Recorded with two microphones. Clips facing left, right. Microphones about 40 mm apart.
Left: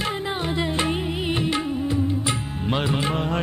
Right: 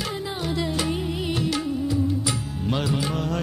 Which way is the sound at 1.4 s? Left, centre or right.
Left.